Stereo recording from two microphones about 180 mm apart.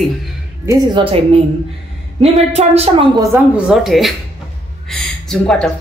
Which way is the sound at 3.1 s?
10° right (ahead or behind).